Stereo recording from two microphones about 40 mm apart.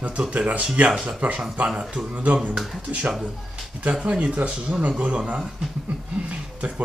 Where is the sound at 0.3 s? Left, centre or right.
Right.